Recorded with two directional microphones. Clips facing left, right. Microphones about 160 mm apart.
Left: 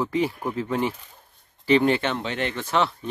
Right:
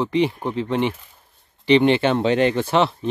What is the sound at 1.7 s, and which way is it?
Speech, 20° right (ahead or behind).